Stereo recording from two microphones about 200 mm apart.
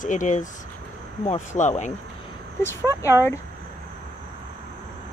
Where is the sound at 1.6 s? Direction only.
35° left (ahead or behind).